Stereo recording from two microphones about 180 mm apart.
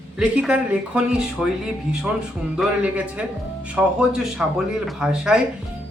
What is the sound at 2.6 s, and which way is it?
A man's voice, 10° right (ahead or behind).